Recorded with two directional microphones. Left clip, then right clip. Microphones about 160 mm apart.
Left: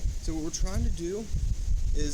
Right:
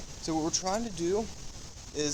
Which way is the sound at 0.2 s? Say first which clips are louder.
Right 5 dB; 30° left (ahead or behind).